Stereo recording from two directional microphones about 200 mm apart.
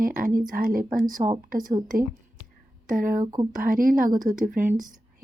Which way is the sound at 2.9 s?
40° right (ahead or behind).